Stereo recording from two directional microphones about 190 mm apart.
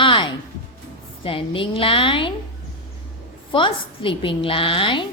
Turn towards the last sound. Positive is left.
turn(degrees=25)  # may be behind; listen again after turning